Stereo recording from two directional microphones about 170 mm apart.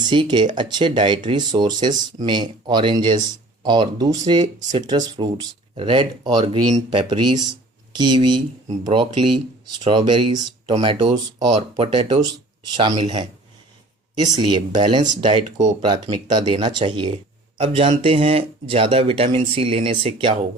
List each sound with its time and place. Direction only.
0.0 s speech: 25° right (ahead or behind)
6.7 s speech: 40° right (ahead or behind)
7.0 s speech: 25° right (ahead or behind)